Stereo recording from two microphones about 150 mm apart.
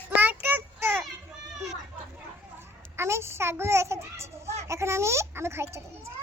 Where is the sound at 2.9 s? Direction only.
15° right (ahead or behind).